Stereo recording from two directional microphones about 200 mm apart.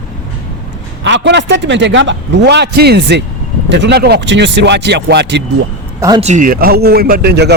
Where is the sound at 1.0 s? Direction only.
60° right (ahead or behind).